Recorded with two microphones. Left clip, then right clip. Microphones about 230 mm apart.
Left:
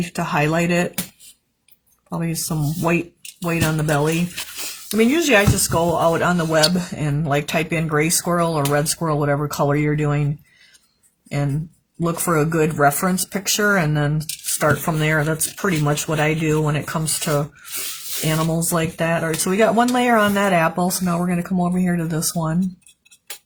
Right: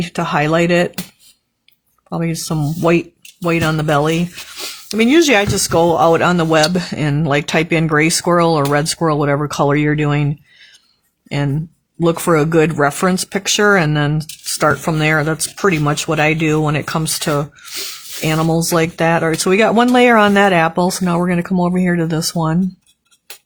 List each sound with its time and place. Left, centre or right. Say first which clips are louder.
0.0 s speech: right 4 dB; right
2.0 s speech: right 5 dB; right
12.0 s speech: right 6 dB; right